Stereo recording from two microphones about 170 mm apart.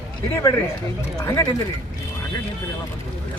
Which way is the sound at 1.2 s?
20° left (ahead or behind).